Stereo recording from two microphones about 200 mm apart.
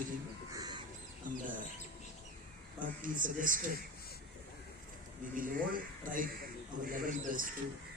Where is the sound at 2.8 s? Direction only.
40° right (ahead or behind).